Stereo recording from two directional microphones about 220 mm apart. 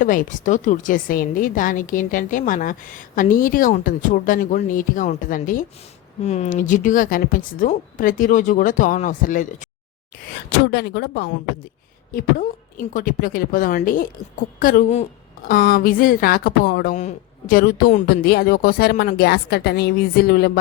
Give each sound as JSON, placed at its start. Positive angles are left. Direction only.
{"t": 0.0, "sound": "a woman's voice", "side_deg": 35}
{"t": 10.5, "sound": "a woman's voice", "side_deg": 50}